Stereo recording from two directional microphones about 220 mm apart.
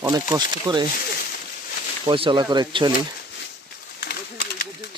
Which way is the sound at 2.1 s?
25° right (ahead or behind).